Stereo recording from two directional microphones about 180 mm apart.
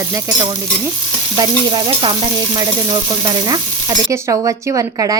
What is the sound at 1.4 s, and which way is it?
Speech, 25° right (ahead or behind).